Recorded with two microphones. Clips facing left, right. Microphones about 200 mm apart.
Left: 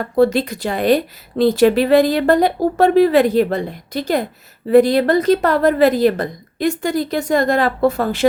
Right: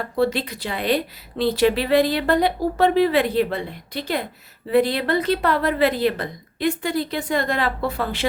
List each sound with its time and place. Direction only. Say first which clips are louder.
0.2 s a woman's voice: left 7 dB; 45° left (ahead or behind)